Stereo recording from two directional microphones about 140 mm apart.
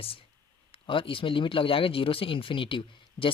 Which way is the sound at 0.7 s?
40° left (ahead or behind).